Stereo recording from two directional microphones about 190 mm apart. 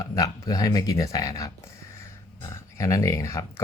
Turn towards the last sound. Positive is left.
turn(degrees=15)  # may be behind; listen again after turning